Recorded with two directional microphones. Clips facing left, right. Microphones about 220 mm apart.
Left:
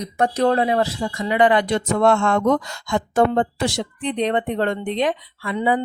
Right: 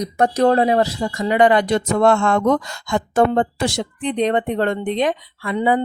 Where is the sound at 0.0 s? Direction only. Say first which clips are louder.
Right 3 dB; 45° right (ahead or behind).